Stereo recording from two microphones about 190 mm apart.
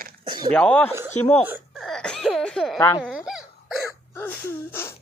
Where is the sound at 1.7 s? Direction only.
Centre (ahead or behind).